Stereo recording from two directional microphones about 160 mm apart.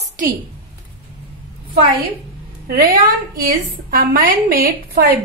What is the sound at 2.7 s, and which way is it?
A woman's voice, 70° right (ahead or behind).